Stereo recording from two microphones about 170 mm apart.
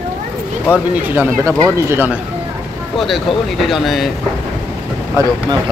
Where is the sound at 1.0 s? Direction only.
10° right (ahead or behind).